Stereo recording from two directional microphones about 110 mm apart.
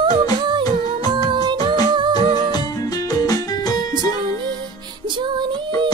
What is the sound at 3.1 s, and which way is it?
Music, 35° left (ahead or behind).